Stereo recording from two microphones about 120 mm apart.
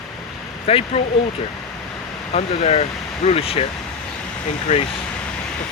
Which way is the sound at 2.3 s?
65° left (ahead or behind).